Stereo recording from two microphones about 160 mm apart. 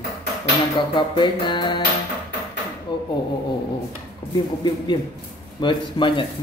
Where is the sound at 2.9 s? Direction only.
30° left (ahead or behind).